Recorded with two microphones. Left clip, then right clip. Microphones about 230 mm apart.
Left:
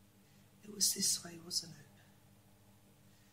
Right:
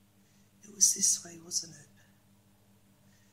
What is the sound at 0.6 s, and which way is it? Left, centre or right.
Speech, centre.